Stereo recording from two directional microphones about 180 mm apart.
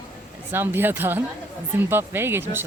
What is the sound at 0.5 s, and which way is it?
Speech, 10° right (ahead or behind).